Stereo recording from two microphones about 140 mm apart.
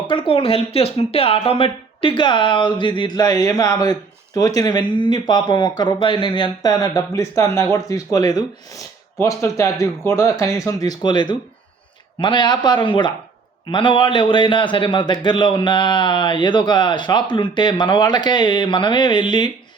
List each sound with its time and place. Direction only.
0.1 s a man's voice: 35° left (ahead or behind)